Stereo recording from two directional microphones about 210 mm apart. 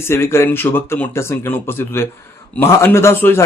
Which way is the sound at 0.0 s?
10° left (ahead or behind).